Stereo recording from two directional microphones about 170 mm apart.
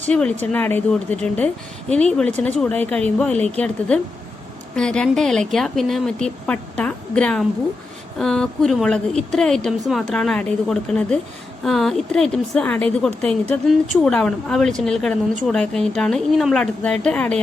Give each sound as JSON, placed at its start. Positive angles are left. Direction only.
{"t": 0.0, "sound": "a woman's voice", "side_deg": 5}